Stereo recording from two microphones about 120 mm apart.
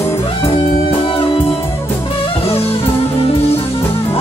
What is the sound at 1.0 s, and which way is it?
Music, 50° left (ahead or behind).